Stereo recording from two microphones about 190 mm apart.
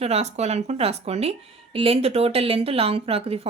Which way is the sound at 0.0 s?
35° right (ahead or behind).